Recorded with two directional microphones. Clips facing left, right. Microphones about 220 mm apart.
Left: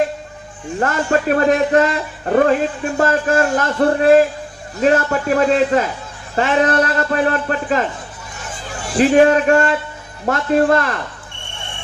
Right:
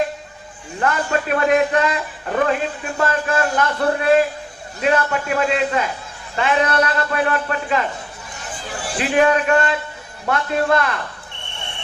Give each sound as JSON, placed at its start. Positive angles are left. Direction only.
{"t": 0.8, "sound": "speech", "side_deg": 40}
{"t": 9.0, "sound": "speech", "side_deg": 40}